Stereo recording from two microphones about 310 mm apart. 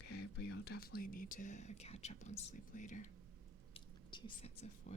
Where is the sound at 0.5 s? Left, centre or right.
Left.